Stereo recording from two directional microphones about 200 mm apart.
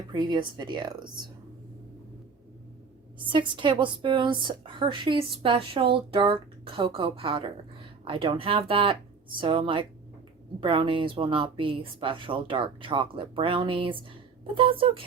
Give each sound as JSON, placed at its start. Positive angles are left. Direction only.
{"t": 0.1, "sound": "speech", "side_deg": -25}
{"t": 3.2, "sound": "speech", "side_deg": -25}